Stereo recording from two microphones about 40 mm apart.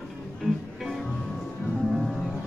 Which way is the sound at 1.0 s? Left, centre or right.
Centre.